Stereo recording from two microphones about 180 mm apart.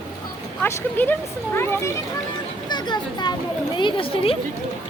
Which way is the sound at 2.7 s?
25° left (ahead or behind).